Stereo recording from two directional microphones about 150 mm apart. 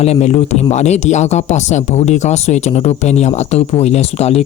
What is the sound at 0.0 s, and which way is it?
Speech, 45° left (ahead or behind).